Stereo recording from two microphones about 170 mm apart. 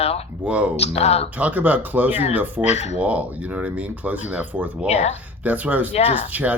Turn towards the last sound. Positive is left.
turn(degrees=-10)  # may be behind; listen again after turning